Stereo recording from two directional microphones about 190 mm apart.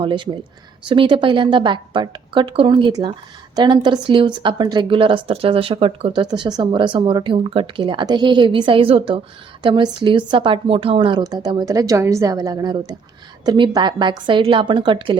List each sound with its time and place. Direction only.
0.0 s speech: 25° right (ahead or behind)